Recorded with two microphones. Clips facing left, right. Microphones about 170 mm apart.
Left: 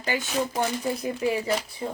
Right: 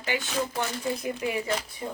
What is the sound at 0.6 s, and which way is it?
Speech, 35° left (ahead or behind).